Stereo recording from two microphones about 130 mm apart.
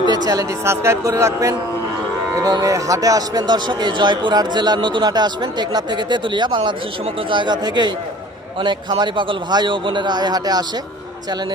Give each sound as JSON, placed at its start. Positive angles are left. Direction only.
{"t": 0.0, "sound": "a man's voice", "side_deg": -30}